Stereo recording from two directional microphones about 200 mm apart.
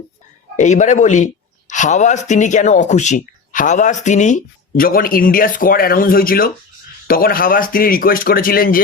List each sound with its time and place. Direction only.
0.5 s speech: 35° left (ahead or behind)